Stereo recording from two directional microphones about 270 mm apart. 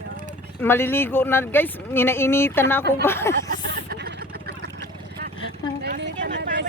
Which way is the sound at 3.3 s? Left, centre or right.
Right.